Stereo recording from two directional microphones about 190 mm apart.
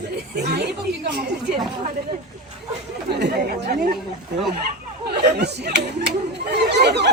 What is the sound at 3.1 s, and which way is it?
Speech, 60° right (ahead or behind).